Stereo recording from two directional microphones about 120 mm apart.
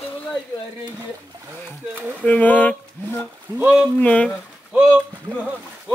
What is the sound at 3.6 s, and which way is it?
Speech, 10° right (ahead or behind).